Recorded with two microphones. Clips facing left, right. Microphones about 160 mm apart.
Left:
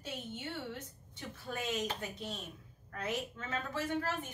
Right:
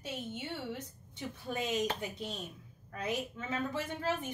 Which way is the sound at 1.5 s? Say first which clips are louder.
Right 3 dB; 15° right (ahead or behind).